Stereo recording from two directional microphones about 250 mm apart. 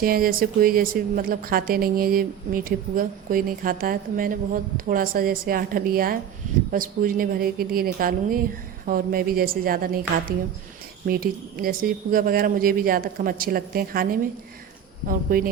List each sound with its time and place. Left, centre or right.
0.0 s speech: right